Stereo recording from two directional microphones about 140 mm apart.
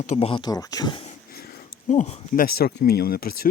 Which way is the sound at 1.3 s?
90° left.